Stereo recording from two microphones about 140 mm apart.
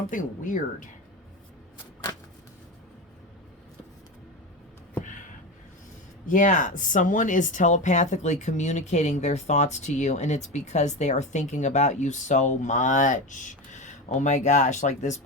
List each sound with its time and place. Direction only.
0.1 s speech: 70° left (ahead or behind)
6.2 s speech: 70° left (ahead or behind)